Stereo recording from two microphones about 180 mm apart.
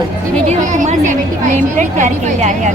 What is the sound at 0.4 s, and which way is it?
Music, 40° right (ahead or behind).